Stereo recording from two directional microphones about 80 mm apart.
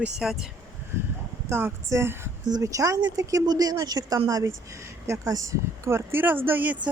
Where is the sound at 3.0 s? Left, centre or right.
Right.